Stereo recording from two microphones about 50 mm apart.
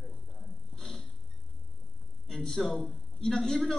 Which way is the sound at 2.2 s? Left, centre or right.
Centre.